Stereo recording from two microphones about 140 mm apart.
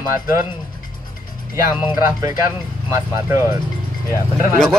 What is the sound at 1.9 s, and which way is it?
Speech, 25° right (ahead or behind).